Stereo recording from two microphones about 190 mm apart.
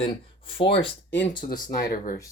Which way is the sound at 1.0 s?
70° left (ahead or behind).